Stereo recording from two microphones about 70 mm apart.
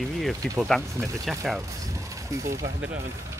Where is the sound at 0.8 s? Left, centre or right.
Right.